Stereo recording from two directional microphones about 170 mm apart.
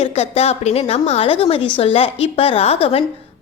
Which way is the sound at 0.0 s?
35° left (ahead or behind).